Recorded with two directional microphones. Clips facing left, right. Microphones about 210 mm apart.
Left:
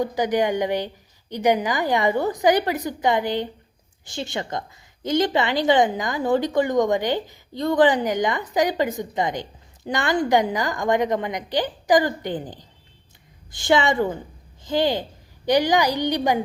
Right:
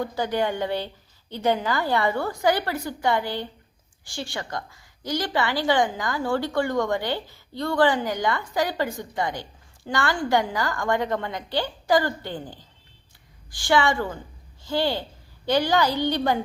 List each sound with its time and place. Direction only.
0.0 s a woman's voice: 15° left (ahead or behind)